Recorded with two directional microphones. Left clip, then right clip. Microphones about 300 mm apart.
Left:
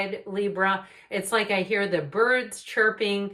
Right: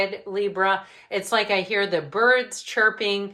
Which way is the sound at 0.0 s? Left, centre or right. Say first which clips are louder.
Right 3 dB; centre.